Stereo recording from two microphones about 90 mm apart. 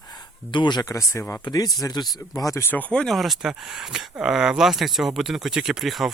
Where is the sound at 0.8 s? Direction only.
35° left (ahead or behind).